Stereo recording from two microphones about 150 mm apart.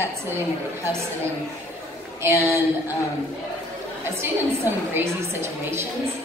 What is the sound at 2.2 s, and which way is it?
Speech, 15° right (ahead or behind).